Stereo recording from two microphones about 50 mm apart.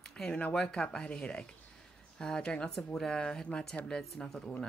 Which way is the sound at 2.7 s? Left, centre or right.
Centre.